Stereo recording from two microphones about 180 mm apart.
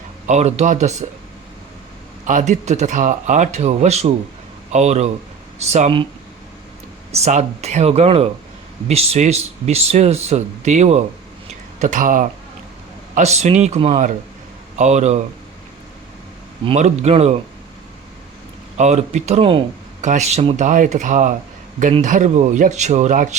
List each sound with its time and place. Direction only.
0.3 s speech: 40° right (ahead or behind)
2.2 s speech: 45° right (ahead or behind)
7.1 s speech: 35° right (ahead or behind)
16.6 s speech: 40° right (ahead or behind)
18.8 s speech: 40° right (ahead or behind)
20.7 s speech: 45° right (ahead or behind)